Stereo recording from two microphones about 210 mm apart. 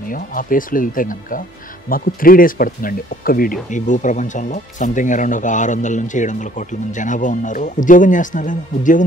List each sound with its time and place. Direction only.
0.1 s speech: 40° left (ahead or behind)